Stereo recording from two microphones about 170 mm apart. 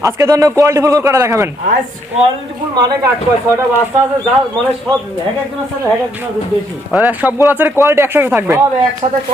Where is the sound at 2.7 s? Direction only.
20° right (ahead or behind).